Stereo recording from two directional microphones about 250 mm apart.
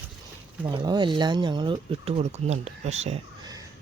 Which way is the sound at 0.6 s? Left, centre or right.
Centre.